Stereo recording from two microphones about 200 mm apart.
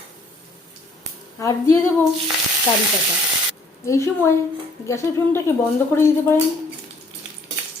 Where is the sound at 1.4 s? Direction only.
15° left (ahead or behind).